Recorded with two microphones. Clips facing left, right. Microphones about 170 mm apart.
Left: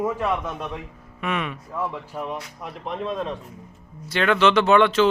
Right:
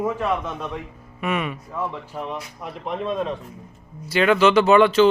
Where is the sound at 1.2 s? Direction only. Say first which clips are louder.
Right 2 dB; 5° right (ahead or behind).